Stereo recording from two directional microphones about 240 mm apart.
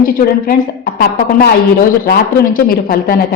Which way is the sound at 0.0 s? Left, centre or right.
Left.